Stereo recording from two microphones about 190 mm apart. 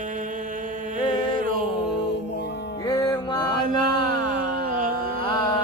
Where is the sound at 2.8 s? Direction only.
20° left (ahead or behind).